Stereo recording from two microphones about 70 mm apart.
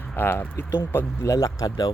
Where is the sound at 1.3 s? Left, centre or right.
Left.